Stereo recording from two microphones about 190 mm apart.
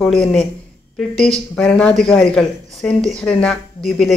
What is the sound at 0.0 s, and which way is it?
A woman's voice, 5° left (ahead or behind).